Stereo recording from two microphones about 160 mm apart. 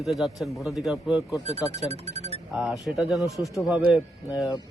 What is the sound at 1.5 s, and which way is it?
Speech, 40° right (ahead or behind).